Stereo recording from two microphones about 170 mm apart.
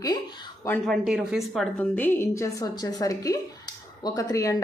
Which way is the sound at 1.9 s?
10° left (ahead or behind).